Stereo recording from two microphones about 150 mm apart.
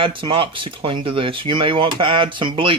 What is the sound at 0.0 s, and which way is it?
Speech, 35° right (ahead or behind).